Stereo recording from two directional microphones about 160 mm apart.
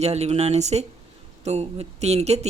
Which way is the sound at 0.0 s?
40° right (ahead or behind).